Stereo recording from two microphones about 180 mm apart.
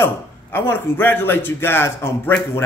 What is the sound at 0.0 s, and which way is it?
A man's voice, 10° left (ahead or behind).